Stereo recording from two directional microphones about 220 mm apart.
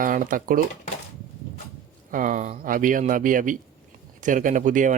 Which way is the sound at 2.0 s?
35° right (ahead or behind).